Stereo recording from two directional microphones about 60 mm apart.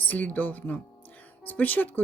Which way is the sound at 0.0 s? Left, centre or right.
Left.